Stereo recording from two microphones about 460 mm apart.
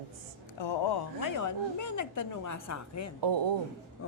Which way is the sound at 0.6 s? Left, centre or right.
Left.